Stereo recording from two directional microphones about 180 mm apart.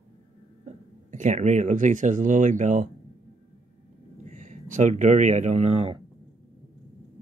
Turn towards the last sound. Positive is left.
turn(degrees=-30)  # may be behind; listen again after turning